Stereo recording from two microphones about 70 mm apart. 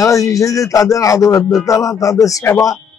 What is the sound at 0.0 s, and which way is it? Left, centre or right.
A man's voice, left.